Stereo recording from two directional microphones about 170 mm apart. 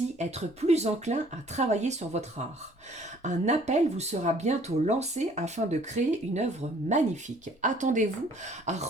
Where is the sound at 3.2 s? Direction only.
45° right (ahead or behind).